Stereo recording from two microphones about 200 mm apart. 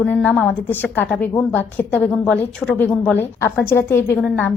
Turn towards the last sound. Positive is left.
turn(degrees=10)  # may be behind; listen again after turning